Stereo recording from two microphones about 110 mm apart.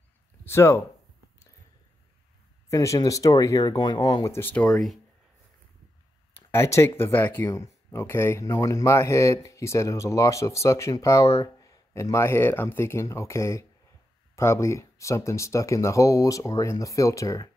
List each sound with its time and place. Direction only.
0.5 s speech: 25° left (ahead or behind)
2.7 s speech: 30° left (ahead or behind)
4.4 s speech: 15° left (ahead or behind)
4.6 s speech: centre (ahead or behind)
6.3 s speech: 25° left (ahead or behind)